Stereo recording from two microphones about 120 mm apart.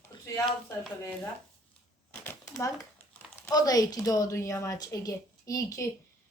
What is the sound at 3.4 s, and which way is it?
A woman's voice, 30° left (ahead or behind).